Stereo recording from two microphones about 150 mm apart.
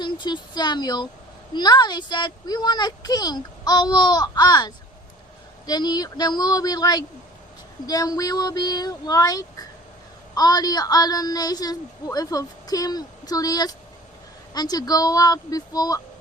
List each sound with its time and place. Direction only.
0.0 s a woman's voice: 30° left (ahead or behind)